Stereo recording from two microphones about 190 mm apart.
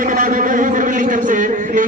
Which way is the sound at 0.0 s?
45° right (ahead or behind).